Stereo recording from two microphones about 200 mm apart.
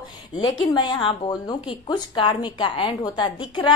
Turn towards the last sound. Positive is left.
turn(degrees=20)  # may be behind; listen again after turning